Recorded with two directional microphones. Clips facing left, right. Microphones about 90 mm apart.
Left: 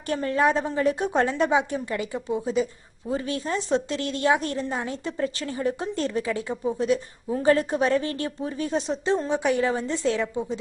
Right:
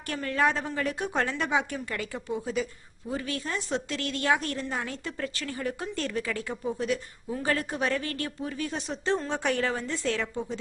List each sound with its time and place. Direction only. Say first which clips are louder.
0.0 s a woman's voice: left 4 dB; 25° left (ahead or behind)